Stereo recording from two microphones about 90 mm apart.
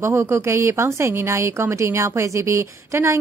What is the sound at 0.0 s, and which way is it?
A woman's voice, 30° right (ahead or behind).